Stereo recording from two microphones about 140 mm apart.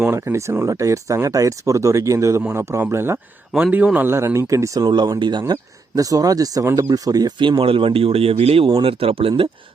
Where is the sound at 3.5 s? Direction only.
5° right (ahead or behind).